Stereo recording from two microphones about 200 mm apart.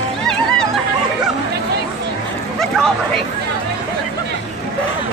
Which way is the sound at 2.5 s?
Centre (ahead or behind).